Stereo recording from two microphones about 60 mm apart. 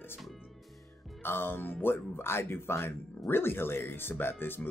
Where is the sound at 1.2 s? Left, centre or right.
Left.